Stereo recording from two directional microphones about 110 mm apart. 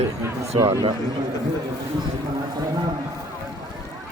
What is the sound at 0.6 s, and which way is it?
Speech, 30° right (ahead or behind).